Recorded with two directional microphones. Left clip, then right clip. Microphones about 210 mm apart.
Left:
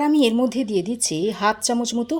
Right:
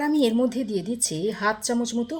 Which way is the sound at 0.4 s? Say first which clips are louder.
Left 4 dB; 35° left (ahead or behind).